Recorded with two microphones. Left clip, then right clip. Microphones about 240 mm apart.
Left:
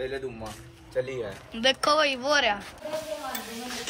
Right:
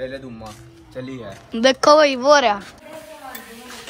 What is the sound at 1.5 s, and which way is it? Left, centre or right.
A woman's voice, right.